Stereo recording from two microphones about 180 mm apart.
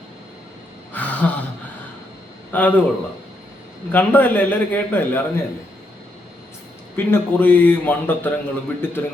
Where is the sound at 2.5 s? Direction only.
10° left (ahead or behind).